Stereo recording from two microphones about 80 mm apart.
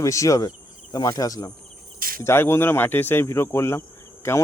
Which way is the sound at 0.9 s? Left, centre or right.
Left.